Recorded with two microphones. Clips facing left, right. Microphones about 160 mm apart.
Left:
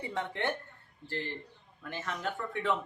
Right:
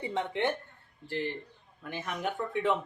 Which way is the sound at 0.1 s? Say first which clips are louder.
Right 4 dB; 15° right (ahead or behind).